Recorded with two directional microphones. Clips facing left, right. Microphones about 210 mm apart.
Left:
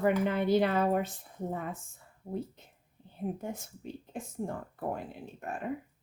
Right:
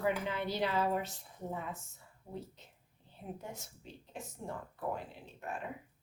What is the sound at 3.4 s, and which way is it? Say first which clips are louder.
Speech: left 8 dB; 50° left (ahead or behind).